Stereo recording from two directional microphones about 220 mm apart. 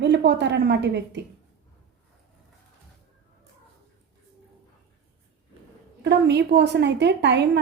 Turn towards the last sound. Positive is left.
turn(degrees=-50)  # may be behind; listen again after turning